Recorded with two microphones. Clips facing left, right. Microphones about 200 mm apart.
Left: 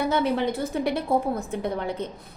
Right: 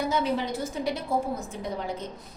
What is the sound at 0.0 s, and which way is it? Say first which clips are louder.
A woman's voice: left 4 dB; 60° left (ahead or behind).